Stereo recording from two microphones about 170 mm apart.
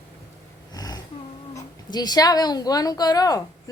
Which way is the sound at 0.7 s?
25° left (ahead or behind).